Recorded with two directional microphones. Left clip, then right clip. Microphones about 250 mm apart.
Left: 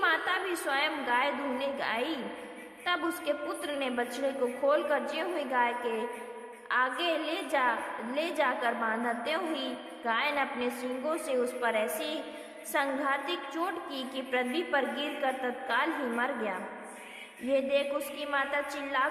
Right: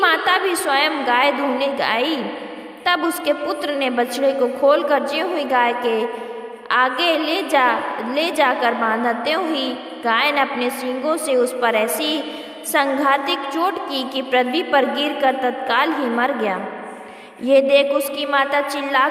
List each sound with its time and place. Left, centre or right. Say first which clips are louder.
0.0 s a woman's voice: right 12 dB; right